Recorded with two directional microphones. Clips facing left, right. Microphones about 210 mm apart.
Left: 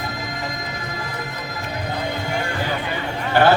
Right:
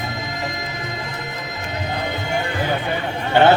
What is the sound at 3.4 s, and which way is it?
Speech, 25° right (ahead or behind).